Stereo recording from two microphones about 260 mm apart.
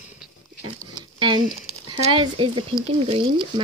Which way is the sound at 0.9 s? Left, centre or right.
Centre.